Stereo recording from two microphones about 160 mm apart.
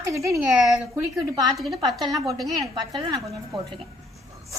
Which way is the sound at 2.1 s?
20° right (ahead or behind).